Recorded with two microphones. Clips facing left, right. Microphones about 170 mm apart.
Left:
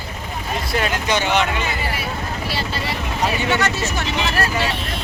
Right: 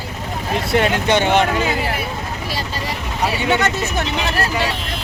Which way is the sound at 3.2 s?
15° right (ahead or behind).